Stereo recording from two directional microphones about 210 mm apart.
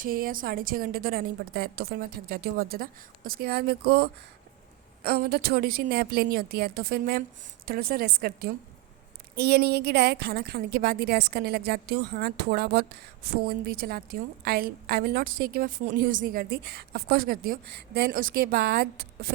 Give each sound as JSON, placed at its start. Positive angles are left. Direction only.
{"t": 0.0, "sound": "a woman's voice", "side_deg": -40}